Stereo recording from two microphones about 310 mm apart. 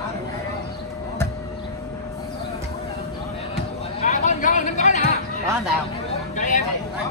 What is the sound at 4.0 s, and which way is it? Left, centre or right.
Chatter, left.